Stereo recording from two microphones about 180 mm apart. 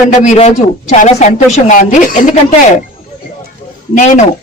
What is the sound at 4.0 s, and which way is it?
Speech, 40° left (ahead or behind).